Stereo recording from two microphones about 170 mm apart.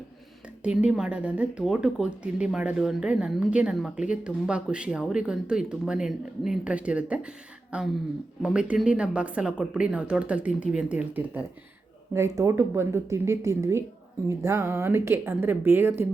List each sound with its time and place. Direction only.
0.6 s speech: 5° right (ahead or behind)